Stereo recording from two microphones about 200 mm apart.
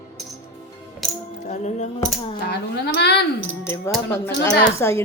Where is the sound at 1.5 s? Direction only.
35° left (ahead or behind).